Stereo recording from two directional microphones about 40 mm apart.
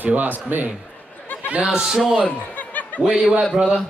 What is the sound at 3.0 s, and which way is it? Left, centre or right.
Speech, centre.